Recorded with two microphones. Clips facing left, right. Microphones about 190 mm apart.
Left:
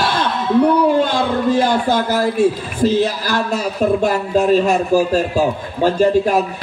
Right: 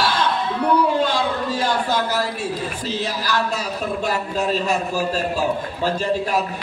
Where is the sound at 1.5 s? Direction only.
50° left (ahead or behind).